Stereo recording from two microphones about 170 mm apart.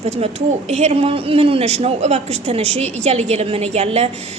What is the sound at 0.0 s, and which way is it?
Speech, 40° right (ahead or behind).